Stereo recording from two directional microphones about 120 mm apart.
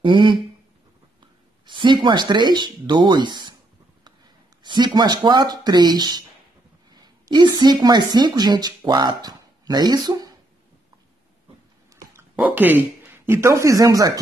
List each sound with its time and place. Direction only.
0.0 s speech: 45° right (ahead or behind)
1.7 s speech: 40° right (ahead or behind)
4.6 s speech: 35° right (ahead or behind)
11.9 s dog: 25° right (ahead or behind)
12.4 s speech: 15° right (ahead or behind); by 14.2 s 30° right (ahead or behind)